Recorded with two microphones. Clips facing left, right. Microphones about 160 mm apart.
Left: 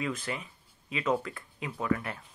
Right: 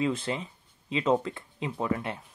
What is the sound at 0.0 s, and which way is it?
Speech, 25° right (ahead or behind).